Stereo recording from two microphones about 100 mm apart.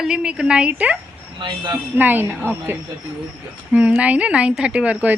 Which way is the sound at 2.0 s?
20° right (ahead or behind).